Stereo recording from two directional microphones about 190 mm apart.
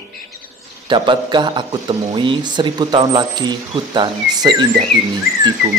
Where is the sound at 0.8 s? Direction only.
25° right (ahead or behind).